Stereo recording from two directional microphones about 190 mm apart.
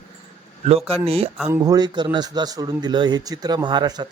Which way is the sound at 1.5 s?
20° right (ahead or behind).